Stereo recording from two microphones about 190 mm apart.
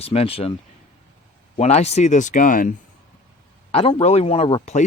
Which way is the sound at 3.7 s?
35° left (ahead or behind).